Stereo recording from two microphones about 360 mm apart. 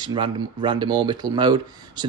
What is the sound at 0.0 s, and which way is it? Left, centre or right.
Speech, centre.